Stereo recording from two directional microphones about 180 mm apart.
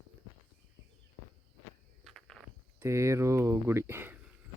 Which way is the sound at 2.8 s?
15° right (ahead or behind).